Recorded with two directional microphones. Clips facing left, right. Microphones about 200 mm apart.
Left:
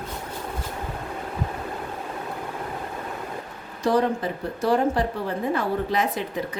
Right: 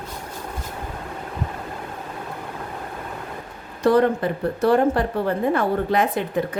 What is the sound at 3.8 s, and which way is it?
Speech, 55° right (ahead or behind).